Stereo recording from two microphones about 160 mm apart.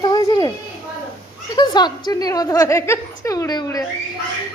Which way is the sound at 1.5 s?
25° left (ahead or behind).